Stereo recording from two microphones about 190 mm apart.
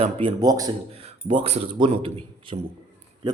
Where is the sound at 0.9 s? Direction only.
30° right (ahead or behind).